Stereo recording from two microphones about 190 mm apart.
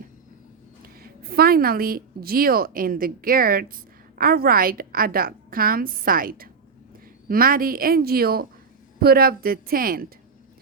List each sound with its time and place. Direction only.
0.9 s a woman's voice: 55° right (ahead or behind)